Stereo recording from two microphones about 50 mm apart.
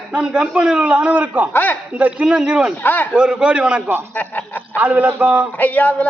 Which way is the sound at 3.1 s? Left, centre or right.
Right.